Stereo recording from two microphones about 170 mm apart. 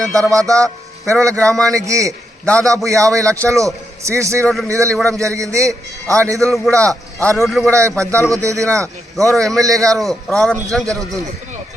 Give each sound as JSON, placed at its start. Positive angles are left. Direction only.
{"t": 0.1, "sound": "a man's voice", "side_deg": -20}
{"t": 2.4, "sound": "a man's voice", "side_deg": 5}
{"t": 2.8, "sound": "a man's voice", "side_deg": -20}
{"t": 6.7, "sound": "a man's voice", "side_deg": 5}
{"t": 7.7, "sound": "a man's voice", "side_deg": -15}
{"t": 9.1, "sound": "a man's voice", "side_deg": 0}
{"t": 9.6, "sound": "a man's voice", "side_deg": -20}
{"t": 10.0, "sound": "a man's voice", "side_deg": 0}